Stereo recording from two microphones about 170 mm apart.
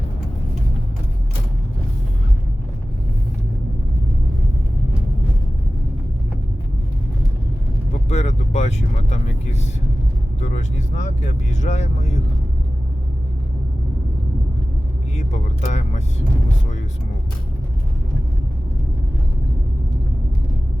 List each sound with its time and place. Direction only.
8.1 s vehicle: 40° left (ahead or behind)
10.4 s speech: 45° left (ahead or behind)
15.1 s speech: 45° left (ahead or behind)